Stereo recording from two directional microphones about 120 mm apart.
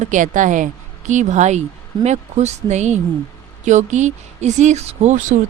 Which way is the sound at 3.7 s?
85° right.